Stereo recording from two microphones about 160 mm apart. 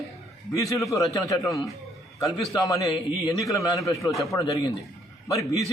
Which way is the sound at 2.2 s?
Centre (ahead or behind).